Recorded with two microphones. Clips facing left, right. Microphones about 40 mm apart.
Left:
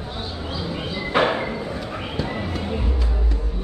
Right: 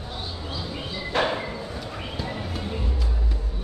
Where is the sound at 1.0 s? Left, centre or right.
Left.